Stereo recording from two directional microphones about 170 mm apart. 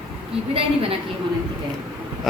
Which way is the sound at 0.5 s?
35° right (ahead or behind).